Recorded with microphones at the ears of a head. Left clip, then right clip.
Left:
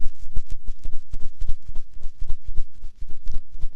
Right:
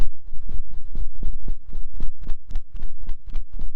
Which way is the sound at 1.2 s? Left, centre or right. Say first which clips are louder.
Right 4 dB; right.